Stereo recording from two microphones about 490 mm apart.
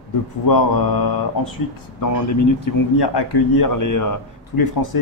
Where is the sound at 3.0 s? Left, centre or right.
Left.